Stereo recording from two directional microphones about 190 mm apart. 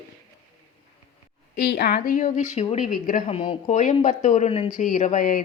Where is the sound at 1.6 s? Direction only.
55° left (ahead or behind).